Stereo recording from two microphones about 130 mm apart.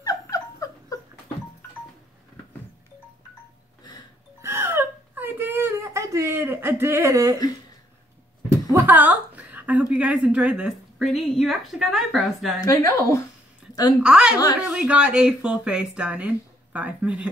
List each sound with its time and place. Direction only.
0.0 s dog: 25° left (ahead or behind)
4.4 s whimper: 20° right (ahead or behind)
8.5 s a woman's voice: 15° right (ahead or behind); by 12.5 s centre (ahead or behind)
12.6 s speech: 25° left (ahead or behind)
14.0 s speech: 5° right (ahead or behind)